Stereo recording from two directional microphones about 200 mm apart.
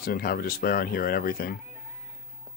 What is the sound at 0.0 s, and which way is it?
Speech, 45° left (ahead or behind).